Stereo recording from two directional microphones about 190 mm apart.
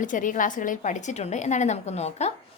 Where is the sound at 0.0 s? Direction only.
45° left (ahead or behind).